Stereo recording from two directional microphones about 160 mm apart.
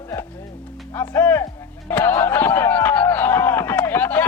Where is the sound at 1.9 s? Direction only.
10° left (ahead or behind).